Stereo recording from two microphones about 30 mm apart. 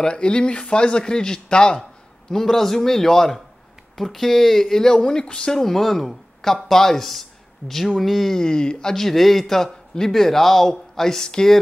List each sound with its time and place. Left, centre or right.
0.0 s a man's voice: left
5.6 s speech: centre
8.3 s speech: left
8.9 s a man's voice: centre